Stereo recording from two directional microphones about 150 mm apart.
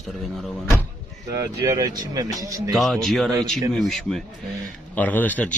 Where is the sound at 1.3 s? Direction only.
20° right (ahead or behind).